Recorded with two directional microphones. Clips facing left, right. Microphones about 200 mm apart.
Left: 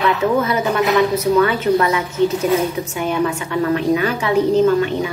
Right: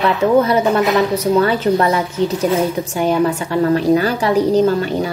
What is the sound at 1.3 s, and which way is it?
Speech, 30° right (ahead or behind).